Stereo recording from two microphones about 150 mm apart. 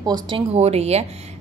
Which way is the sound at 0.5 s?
45° right (ahead or behind).